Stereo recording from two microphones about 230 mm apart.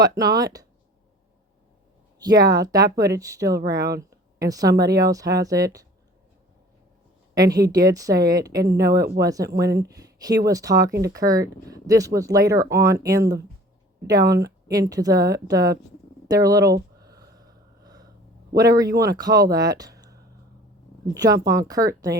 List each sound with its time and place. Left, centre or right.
0.0 s speech: centre
2.1 s speech: centre
4.1 s a sound: centre
4.9 s speech: centre
7.3 s speech: centre
9.0 s speech: right
9.2 s speech: centre
17.0 s gasp: centre
18.5 s speech: centre